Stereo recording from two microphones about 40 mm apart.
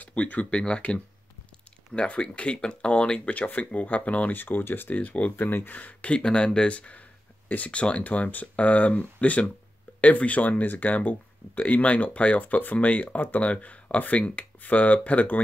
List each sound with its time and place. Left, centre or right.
0.0 s speech: left
2.0 s speech: left
3.3 s speech: left
4.3 s speech: left
4.9 s speech: left
5.3 s speech: left
5.8 s speech: left
7.4 s speech: left
7.7 s speech: left
8.0 s speech: left